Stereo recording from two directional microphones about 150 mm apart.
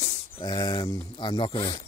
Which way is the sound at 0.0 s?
30° left (ahead or behind).